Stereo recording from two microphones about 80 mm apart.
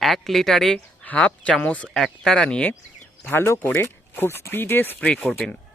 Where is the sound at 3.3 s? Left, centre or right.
Left.